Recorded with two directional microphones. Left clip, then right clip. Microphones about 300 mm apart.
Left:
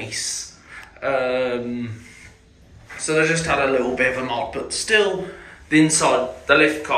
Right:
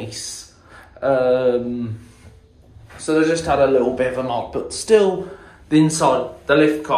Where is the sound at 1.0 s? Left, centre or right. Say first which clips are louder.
Right 5 dB; centre.